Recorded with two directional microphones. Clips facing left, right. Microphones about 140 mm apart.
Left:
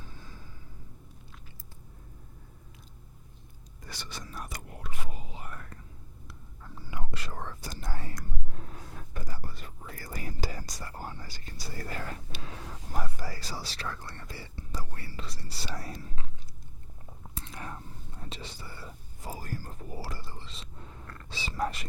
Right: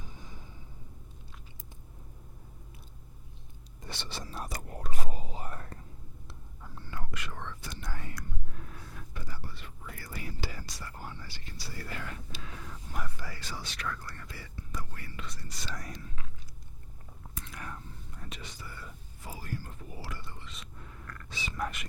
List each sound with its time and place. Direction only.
0.0 s a sound: 15° right (ahead or behind)
3.8 s speech: 25° right (ahead or behind)
4.5 s whispering: 40° right (ahead or behind)
6.6 s whispering: centre (ahead or behind)
6.8 s whispering: 15° left (ahead or behind)
7.1 s whispering: 35° left (ahead or behind)
17.3 s whispering: 30° left (ahead or behind)